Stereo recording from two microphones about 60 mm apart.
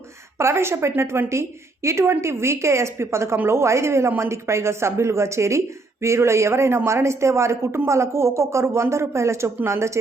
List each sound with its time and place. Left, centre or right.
0.3 s speech: right